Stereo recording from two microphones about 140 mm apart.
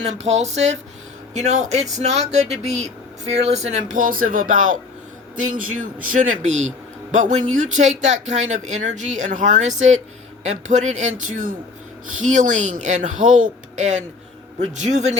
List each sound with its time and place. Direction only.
0.0 s a man's voice: 55° right (ahead or behind)